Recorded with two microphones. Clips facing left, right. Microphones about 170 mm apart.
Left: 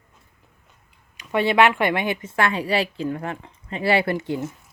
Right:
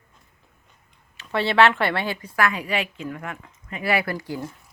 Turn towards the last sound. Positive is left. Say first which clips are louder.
# left 5 dB
turn(degrees=25)  # may be behind; listen again after turning